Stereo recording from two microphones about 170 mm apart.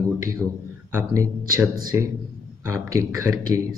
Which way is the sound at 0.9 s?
15° right (ahead or behind).